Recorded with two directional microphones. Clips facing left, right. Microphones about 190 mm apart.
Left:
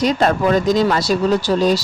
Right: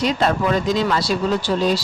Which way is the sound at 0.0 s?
45° left (ahead or behind).